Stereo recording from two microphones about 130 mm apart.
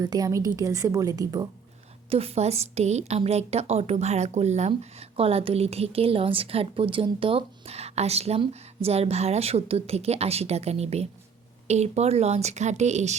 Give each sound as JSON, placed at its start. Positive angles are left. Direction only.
{"t": 0.0, "sound": "a woman's voice", "side_deg": -30}
{"t": 2.0, "sound": "a woman's voice", "side_deg": -50}